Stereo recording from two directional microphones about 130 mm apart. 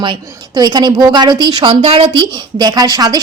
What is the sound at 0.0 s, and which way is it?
A woman's voice, 35° right (ahead or behind).